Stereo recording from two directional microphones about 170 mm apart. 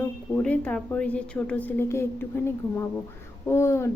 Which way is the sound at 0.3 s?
5° left (ahead or behind).